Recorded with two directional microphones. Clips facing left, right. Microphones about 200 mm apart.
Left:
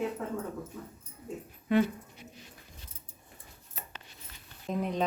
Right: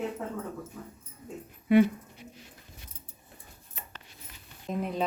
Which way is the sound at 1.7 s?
10° right (ahead or behind).